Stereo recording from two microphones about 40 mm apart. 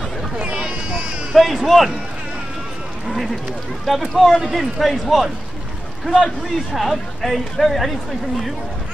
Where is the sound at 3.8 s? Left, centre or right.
Centre.